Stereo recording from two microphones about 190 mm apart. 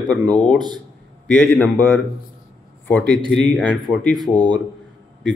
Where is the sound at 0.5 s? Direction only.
25° right (ahead or behind).